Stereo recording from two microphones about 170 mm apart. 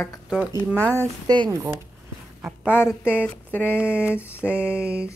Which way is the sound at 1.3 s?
25° right (ahead or behind).